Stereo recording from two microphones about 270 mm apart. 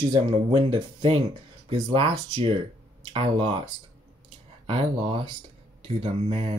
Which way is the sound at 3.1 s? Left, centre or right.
Centre.